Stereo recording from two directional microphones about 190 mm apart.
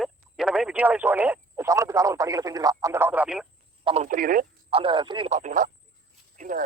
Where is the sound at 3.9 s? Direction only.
35° right (ahead or behind).